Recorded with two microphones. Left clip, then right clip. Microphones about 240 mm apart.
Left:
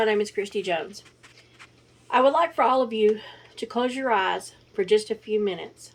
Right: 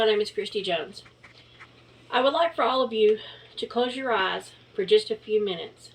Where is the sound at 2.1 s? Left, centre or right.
Left.